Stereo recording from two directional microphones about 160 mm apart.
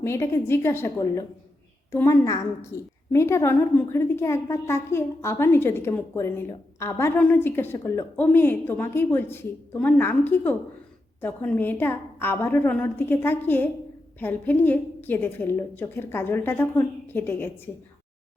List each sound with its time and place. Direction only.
0.0 s a woman's voice: 15° left (ahead or behind)